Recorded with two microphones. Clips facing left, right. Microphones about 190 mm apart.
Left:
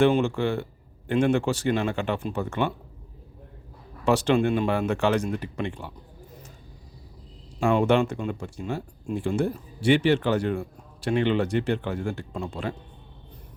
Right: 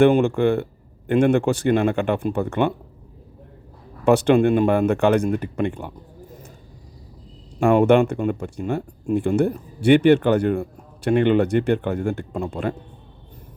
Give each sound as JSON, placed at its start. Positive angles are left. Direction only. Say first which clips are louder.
{"t": 0.0, "sound": "speech", "louder": "right 6 dB", "side_deg": -55}
{"t": 4.0, "sound": "speech", "louder": "right 6 dB", "side_deg": -55}
{"t": 7.6, "sound": "speech", "louder": "right 6 dB", "side_deg": -55}